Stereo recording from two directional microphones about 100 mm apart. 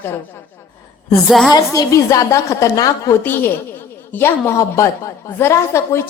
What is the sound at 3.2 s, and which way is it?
A woman's voice, 20° left (ahead or behind).